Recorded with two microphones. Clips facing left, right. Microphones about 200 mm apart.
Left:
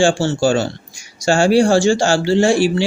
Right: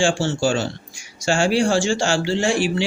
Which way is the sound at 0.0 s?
40° left (ahead or behind).